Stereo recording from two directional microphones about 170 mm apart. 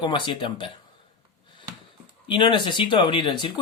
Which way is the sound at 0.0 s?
30° left (ahead or behind).